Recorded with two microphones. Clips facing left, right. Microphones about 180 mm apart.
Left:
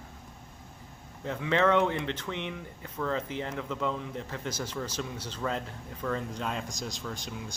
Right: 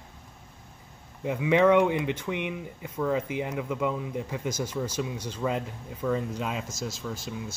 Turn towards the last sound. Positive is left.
turn(degrees=0)  # may be behind; listen again after turning